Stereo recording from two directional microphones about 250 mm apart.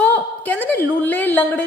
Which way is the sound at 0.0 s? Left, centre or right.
Centre.